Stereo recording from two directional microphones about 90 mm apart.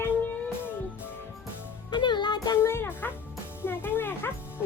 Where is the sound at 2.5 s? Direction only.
30° left (ahead or behind).